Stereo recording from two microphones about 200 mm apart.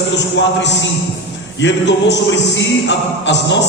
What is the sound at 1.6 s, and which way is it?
A man's voice, 60° left (ahead or behind).